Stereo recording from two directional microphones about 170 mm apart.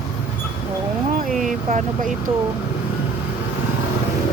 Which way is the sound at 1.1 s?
50° right (ahead or behind).